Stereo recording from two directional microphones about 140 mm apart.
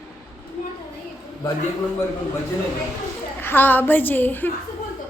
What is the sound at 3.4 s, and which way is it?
A woman's voice, 15° left (ahead or behind).